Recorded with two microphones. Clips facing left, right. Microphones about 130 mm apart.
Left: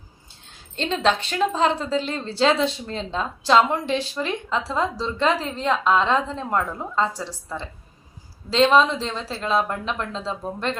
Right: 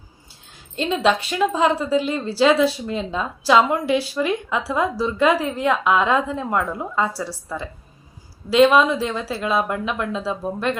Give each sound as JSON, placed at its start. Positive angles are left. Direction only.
{"t": 1.0, "sound": "a woman's voice", "side_deg": -5}
{"t": 8.7, "sound": "a woman's voice", "side_deg": -10}